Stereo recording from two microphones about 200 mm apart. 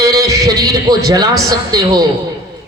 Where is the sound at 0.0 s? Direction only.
15° right (ahead or behind).